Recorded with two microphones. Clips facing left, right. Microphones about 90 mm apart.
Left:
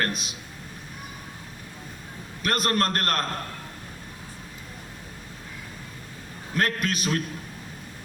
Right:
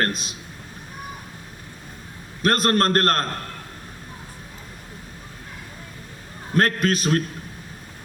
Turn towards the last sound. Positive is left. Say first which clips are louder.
# right 6 dB
turn(degrees=-45)  # may be behind; listen again after turning